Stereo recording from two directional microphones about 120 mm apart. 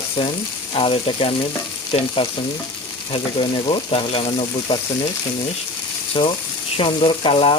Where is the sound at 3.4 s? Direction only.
50° left (ahead or behind).